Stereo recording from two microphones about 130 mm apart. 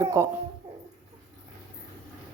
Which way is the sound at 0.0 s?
30° right (ahead or behind).